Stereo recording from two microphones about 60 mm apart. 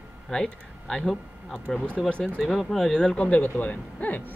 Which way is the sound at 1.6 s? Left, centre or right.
Centre.